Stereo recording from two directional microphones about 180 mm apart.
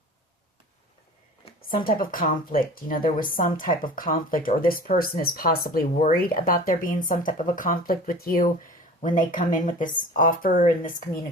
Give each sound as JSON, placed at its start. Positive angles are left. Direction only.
{"t": 1.6, "sound": "speech", "side_deg": 50}